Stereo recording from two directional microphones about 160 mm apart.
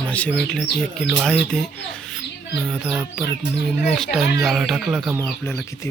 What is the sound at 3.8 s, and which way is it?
Speech, centre (ahead or behind).